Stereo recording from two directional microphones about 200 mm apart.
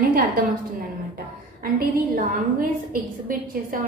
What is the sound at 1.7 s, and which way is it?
A woman's voice, 45° right (ahead or behind).